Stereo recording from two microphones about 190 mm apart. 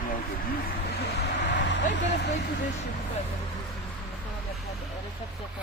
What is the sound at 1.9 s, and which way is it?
Speech, 70° left (ahead or behind).